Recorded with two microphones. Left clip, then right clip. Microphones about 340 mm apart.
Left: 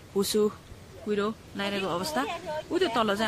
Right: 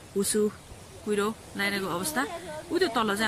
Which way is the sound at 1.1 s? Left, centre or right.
Centre.